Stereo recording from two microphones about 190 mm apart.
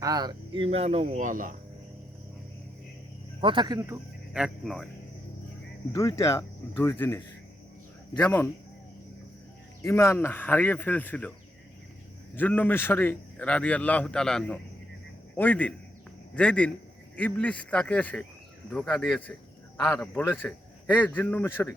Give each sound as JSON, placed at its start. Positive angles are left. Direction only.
{"t": 0.0, "sound": "speech", "side_deg": -20}
{"t": 3.4, "sound": "speech", "side_deg": -25}
{"t": 4.4, "sound": "speech", "side_deg": 0}
{"t": 6.0, "sound": "a man's voice", "side_deg": 15}
{"t": 9.8, "sound": "a man's voice", "side_deg": 15}
{"t": 12.4, "sound": "a man's voice", "side_deg": 10}